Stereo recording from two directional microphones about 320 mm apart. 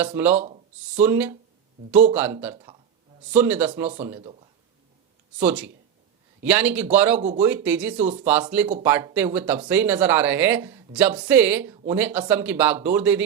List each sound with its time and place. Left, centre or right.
0.0 s speech: centre
5.5 s speech: centre
7.2 s speech: right
7.4 s speech: centre